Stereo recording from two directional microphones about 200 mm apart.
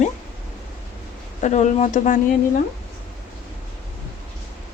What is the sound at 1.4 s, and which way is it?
Speech, 35° left (ahead or behind).